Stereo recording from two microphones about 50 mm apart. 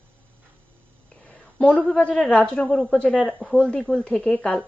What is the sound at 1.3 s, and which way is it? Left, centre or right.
A woman's voice, left.